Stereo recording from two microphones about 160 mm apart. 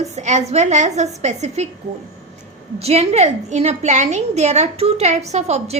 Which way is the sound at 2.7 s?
40° right (ahead or behind).